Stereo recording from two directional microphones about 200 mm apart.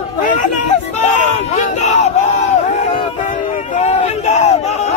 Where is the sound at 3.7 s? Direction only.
35° left (ahead or behind).